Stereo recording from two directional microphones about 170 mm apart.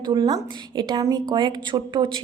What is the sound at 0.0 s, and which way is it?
A woman's voice, 25° right (ahead or behind).